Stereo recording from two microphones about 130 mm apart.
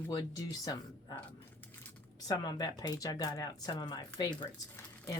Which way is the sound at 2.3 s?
30° left (ahead or behind).